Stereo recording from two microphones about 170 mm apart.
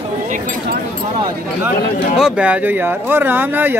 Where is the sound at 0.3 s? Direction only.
50° right (ahead or behind).